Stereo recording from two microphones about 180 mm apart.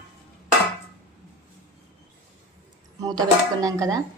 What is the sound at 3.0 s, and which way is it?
Speech, 20° right (ahead or behind).